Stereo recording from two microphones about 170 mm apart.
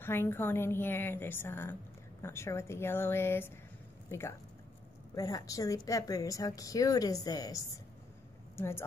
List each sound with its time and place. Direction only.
0.0 s a woman's voice: 15° left (ahead or behind)